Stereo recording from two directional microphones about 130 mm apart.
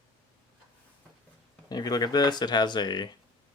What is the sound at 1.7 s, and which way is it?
Speech, 30° left (ahead or behind).